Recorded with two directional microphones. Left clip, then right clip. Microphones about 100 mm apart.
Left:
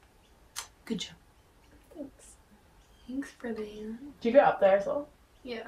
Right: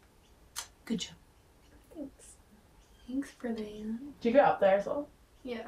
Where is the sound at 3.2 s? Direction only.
15° right (ahead or behind).